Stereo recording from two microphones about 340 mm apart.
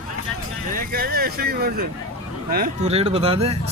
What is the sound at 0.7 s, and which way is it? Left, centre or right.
A man's voice, right.